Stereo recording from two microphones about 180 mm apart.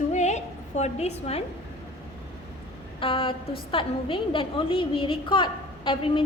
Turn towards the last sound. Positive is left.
turn(degrees=30)  # may be behind; listen again after turning